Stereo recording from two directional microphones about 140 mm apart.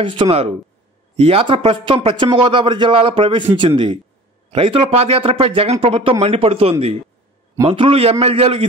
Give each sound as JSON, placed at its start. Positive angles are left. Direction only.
{"t": 0.0, "sound": "a man's voice", "side_deg": -40}